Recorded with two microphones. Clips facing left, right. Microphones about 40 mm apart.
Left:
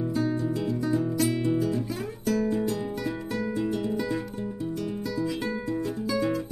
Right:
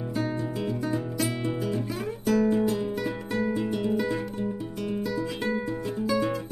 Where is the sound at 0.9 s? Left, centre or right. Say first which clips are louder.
Left 4 dB; centre.